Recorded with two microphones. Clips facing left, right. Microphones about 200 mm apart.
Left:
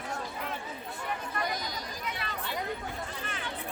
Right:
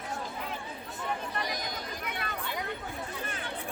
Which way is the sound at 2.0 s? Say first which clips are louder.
Even; 50° right (ahead or behind).